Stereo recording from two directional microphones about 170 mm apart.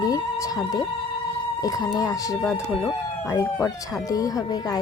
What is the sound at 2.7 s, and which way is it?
Speech, centre (ahead or behind).